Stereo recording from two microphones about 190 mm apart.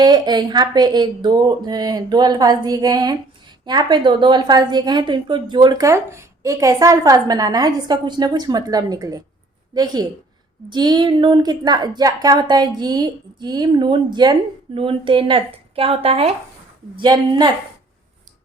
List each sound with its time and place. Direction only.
0.0 s speech: 20° right (ahead or behind)